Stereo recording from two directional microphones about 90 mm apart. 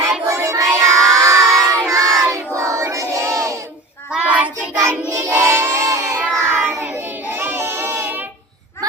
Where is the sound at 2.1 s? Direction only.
35° right (ahead or behind).